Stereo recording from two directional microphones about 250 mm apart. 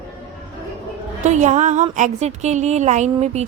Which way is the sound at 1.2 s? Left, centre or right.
Right.